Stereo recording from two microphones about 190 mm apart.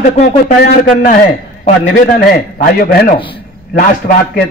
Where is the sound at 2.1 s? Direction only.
55° left (ahead or behind).